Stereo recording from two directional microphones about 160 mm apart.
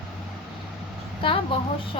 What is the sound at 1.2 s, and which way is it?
Speech, 35° left (ahead or behind).